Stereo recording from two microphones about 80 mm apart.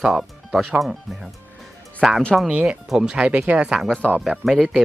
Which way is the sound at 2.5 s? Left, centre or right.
Centre.